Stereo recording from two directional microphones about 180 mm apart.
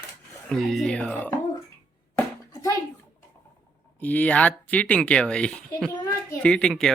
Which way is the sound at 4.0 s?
10° left (ahead or behind).